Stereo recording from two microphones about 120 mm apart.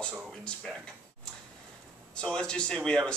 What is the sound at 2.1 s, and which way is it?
Speech, 5° left (ahead or behind).